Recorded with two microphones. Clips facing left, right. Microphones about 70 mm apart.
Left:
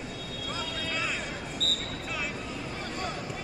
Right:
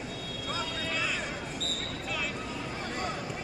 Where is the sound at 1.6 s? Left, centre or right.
Left.